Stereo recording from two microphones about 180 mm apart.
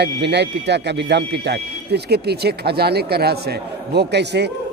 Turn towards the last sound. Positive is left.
turn(degrees=-70)  # may be behind; listen again after turning